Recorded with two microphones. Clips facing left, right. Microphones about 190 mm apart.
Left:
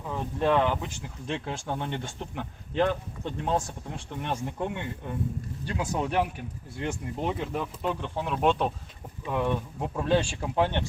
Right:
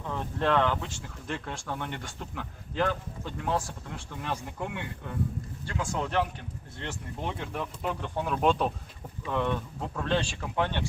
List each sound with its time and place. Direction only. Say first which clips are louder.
0.0 s speech: left 2 dB; 15° left (ahead or behind)
7.3 s speech: left 3 dB; 5° left (ahead or behind)
9.2 s speech: left 1 dB; 10° left (ahead or behind)